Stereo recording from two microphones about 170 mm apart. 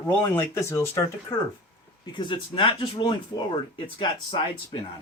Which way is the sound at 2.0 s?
30° left (ahead or behind).